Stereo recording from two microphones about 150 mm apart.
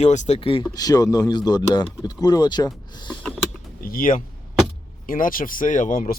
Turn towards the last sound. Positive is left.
turn(degrees=70)  # may be behind; listen again after turning